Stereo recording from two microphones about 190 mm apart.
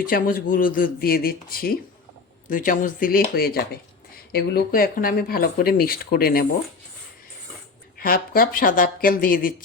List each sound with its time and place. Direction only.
0.0 s speech: 50° left (ahead or behind)
7.9 s speech: 50° left (ahead or behind)